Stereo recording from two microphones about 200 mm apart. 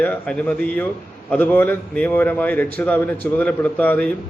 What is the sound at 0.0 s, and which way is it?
A man's voice, 5° left (ahead or behind).